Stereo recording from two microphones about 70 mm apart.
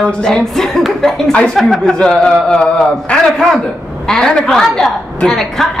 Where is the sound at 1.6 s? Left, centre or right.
Centre.